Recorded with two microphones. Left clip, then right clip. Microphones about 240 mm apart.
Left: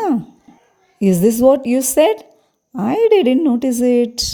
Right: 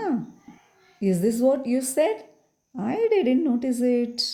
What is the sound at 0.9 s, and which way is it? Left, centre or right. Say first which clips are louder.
Speech: left 9 dB; left.